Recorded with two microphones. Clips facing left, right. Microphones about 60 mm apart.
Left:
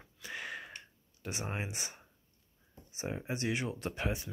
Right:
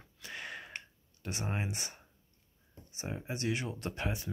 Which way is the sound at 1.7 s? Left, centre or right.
Centre.